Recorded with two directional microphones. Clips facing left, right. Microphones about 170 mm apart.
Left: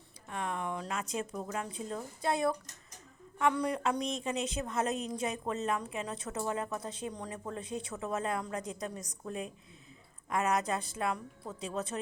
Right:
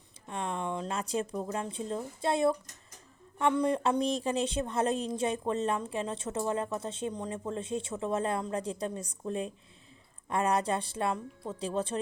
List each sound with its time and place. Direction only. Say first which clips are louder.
0.3 s a woman's voice: right 2 dB; 20° right (ahead or behind)